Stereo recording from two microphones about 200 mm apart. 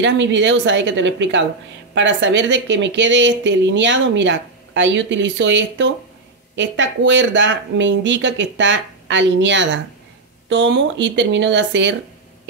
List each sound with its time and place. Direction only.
0.0 s speech: 65° right (ahead or behind)